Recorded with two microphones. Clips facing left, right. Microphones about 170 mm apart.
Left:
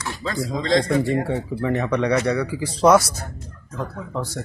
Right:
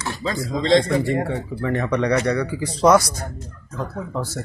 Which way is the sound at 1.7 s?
5° left (ahead or behind).